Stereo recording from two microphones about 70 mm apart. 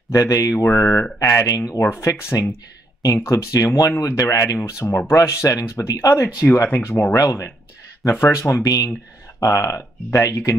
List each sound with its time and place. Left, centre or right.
0.1 s speech: left
0.7 s speech: left
1.2 s speech: left
6.5 s speech: left
7.2 s speech: left
8.6 s speech: left